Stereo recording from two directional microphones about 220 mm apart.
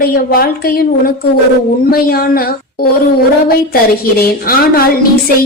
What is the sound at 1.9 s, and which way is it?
Speech, 45° left (ahead or behind).